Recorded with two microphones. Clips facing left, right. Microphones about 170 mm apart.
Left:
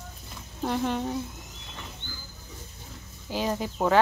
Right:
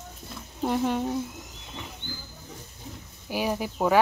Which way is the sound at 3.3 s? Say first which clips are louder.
Right 1 dB; 10° right (ahead or behind).